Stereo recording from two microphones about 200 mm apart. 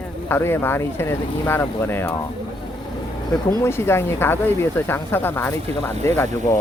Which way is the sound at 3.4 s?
10° left (ahead or behind).